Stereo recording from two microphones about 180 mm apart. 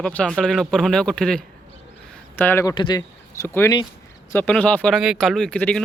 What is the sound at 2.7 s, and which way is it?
Speech, 25° left (ahead or behind).